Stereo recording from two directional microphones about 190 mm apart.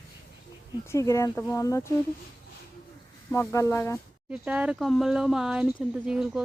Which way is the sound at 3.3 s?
15° left (ahead or behind).